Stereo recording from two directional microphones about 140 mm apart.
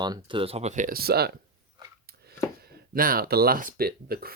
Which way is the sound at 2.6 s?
90° right.